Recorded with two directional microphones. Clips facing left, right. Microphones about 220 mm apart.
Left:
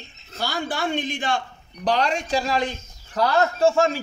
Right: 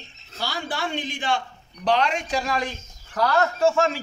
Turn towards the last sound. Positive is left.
turn(degrees=30)  # may be behind; listen again after turning